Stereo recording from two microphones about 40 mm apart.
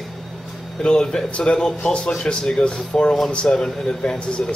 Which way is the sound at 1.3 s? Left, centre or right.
Left.